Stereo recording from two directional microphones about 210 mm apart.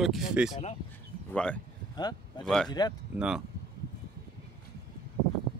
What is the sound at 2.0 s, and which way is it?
Speech, 20° left (ahead or behind).